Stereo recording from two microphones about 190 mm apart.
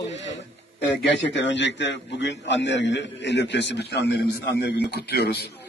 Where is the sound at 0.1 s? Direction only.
70° left (ahead or behind).